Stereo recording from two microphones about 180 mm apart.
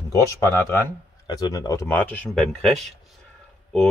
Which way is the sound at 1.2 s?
20° left (ahead or behind).